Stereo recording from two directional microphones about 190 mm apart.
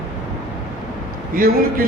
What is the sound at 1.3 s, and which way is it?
Speech, 50° right (ahead or behind).